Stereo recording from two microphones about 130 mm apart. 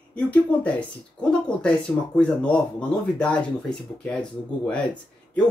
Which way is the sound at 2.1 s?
10° left (ahead or behind).